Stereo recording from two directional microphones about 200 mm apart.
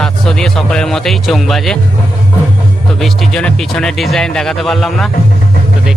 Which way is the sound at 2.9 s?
Centre (ahead or behind).